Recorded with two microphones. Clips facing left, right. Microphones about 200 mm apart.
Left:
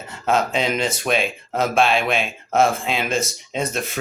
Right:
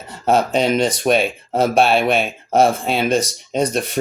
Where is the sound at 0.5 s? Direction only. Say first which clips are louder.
Right 5 dB; 35° right (ahead or behind).